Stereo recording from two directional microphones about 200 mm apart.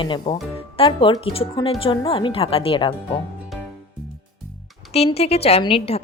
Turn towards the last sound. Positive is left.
turn(degrees=30)  # may be behind; listen again after turning